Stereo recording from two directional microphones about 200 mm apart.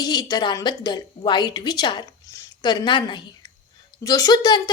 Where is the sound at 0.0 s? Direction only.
20° left (ahead or behind).